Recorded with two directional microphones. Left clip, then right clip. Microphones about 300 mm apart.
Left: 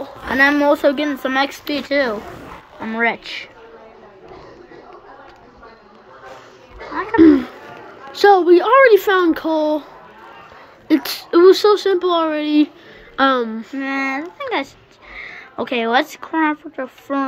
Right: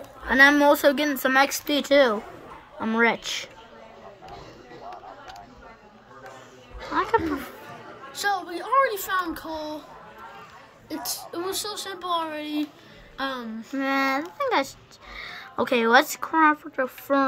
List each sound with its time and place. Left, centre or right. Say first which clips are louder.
0.3 s a woman's voice: left 2 dB; centre
6.9 s a sound: left 1 dB; right
8.2 s speech: left 16 dB; centre
11.0 s speech: left 18 dB; centre
13.7 s a woman's voice: left 2 dB; centre